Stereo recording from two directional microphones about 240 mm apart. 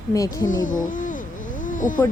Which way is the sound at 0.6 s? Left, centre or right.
Left.